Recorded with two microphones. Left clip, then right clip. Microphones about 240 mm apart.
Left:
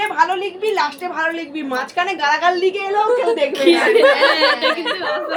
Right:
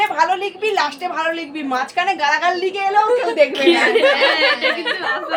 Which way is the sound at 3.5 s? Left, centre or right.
Centre.